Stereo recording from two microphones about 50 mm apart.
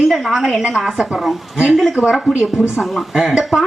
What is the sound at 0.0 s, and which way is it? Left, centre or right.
A woman's voice, centre.